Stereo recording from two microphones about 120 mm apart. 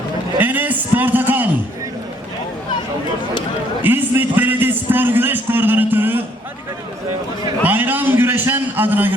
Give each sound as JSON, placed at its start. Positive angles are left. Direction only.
{"t": 0.3, "sound": "a sound", "side_deg": -15}
{"t": 3.8, "sound": "a man's voice", "side_deg": -15}
{"t": 7.6, "sound": "a man's voice", "side_deg": -15}